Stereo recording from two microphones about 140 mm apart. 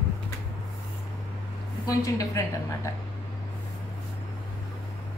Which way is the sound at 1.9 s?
25° left (ahead or behind).